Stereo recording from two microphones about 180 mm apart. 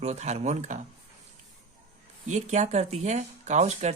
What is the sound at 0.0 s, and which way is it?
Speech, 40° right (ahead or behind).